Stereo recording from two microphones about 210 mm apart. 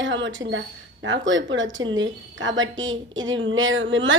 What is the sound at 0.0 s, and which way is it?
A woman's voice, 60° right (ahead or behind).